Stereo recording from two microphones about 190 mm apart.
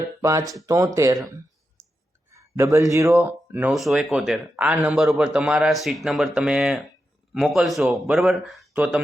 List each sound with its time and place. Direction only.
0.2 s speech: 15° right (ahead or behind)
1.8 s clicking: 15° right (ahead or behind)
2.3 s speech: 15° right (ahead or behind)